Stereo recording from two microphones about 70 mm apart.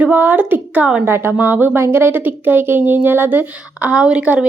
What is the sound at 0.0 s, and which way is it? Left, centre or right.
A woman's voice, right.